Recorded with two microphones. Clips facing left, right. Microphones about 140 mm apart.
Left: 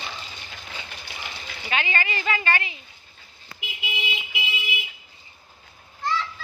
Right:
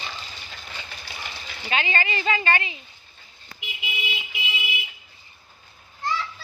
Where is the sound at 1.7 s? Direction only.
20° right (ahead or behind).